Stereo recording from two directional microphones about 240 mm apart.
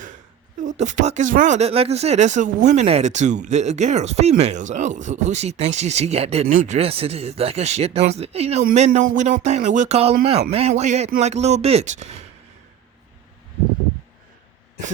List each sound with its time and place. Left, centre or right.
0.6 s speech: right